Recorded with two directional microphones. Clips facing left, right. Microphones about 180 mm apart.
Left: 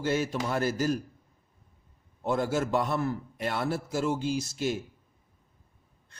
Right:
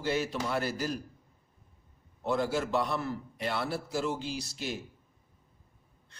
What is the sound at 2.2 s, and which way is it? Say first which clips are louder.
A man's voice: left 2 dB; 50° left (ahead or behind).